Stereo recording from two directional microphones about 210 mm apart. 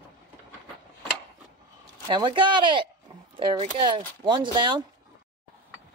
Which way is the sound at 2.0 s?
20° right (ahead or behind).